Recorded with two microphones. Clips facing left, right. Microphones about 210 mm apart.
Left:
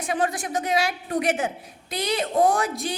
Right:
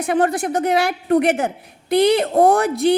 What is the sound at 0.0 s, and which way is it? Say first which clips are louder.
Child singing: right 7 dB; 60° right (ahead or behind).